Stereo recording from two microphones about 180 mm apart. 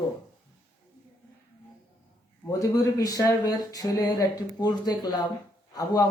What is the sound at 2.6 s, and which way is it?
Speech, 20° left (ahead or behind).